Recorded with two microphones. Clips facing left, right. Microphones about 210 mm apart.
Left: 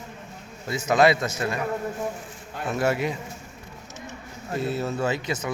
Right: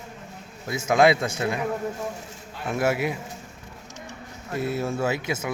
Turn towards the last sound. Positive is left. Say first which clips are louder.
# even
turn(degrees=-10)  # may be behind; listen again after turning